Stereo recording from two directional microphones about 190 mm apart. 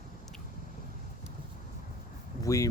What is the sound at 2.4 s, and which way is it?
Speech, 15° left (ahead or behind).